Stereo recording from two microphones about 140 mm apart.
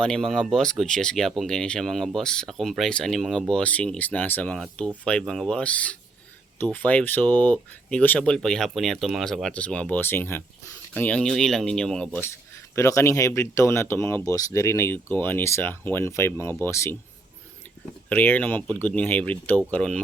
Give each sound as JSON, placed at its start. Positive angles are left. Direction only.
{"t": 0.0, "sound": "speech", "side_deg": 5}
{"t": 12.2, "sound": "speech", "side_deg": 20}
{"t": 18.1, "sound": "speech", "side_deg": 15}